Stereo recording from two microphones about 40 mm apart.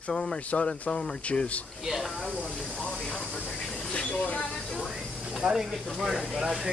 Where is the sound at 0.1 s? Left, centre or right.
Left.